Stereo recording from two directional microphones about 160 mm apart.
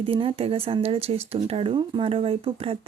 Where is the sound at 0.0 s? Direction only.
35° right (ahead or behind).